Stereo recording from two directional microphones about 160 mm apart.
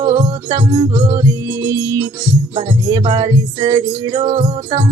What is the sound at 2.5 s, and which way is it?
Music, 30° right (ahead or behind).